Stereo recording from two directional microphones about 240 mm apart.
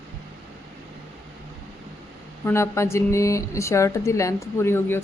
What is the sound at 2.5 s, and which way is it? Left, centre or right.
A woman's voice, centre.